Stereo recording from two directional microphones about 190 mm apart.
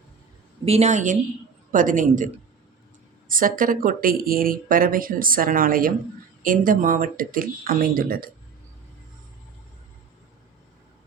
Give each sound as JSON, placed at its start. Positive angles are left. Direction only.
{"t": 0.6, "sound": "a woman's voice", "side_deg": -35}